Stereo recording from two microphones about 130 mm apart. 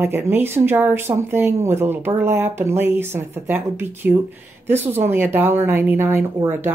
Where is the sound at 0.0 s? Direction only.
15° right (ahead or behind).